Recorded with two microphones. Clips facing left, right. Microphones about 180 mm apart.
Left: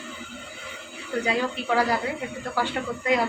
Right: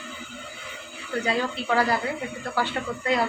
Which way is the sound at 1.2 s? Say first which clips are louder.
Even; 10° left (ahead or behind).